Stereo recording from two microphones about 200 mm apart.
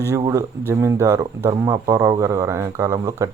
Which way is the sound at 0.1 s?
15° right (ahead or behind).